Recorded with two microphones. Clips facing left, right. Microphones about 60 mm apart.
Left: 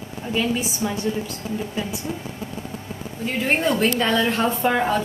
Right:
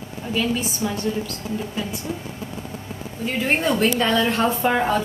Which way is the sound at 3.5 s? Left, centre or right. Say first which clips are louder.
Even; centre.